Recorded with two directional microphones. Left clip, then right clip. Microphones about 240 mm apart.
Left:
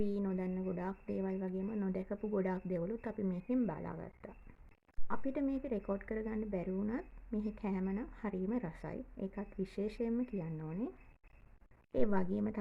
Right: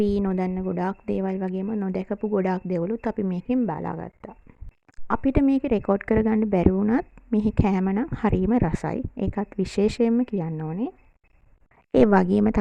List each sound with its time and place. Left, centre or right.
0.0 s a woman's voice: right